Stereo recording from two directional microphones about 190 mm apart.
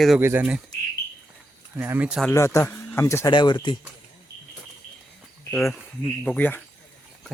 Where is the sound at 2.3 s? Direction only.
15° left (ahead or behind).